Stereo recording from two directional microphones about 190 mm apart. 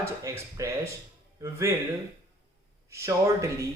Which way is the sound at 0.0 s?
20° right (ahead or behind).